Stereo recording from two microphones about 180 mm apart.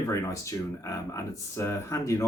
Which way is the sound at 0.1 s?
15° left (ahead or behind).